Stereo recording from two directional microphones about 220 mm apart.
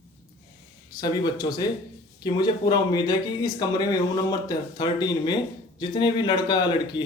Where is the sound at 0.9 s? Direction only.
20° left (ahead or behind).